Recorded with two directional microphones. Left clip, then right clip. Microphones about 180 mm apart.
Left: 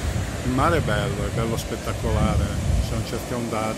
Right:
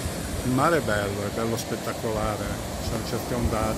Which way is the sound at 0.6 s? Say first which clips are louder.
Left 1 dB; 5° left (ahead or behind).